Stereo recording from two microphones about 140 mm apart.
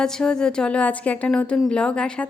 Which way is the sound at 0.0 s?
5° left (ahead or behind).